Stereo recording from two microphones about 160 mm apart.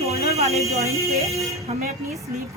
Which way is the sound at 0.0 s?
40° right (ahead or behind).